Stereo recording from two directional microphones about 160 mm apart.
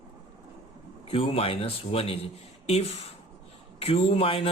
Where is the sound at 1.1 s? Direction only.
35° left (ahead or behind).